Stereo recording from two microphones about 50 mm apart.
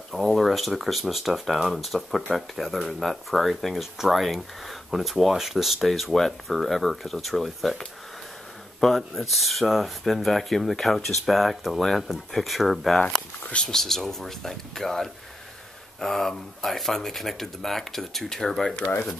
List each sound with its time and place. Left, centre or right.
0.1 s speech: centre
8.8 s speech: centre
18.8 s speech: left